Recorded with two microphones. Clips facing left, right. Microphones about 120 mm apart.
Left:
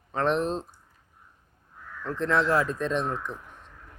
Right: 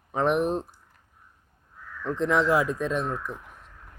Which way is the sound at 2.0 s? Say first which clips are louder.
Right 2 dB; 15° right (ahead or behind).